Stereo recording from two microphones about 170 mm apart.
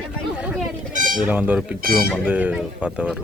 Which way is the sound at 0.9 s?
50° right (ahead or behind).